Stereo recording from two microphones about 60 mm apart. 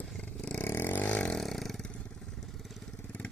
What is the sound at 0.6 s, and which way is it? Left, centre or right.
Vehicle, left.